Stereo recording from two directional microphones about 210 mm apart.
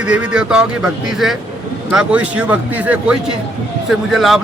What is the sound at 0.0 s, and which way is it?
A man's voice, 5° right (ahead or behind).